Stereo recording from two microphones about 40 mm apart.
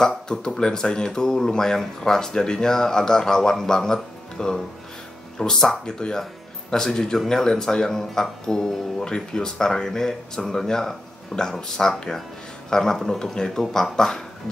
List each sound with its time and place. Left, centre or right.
0.3 s speech: centre